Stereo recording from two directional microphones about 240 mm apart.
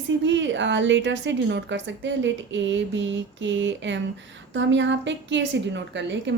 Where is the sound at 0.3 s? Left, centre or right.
Right.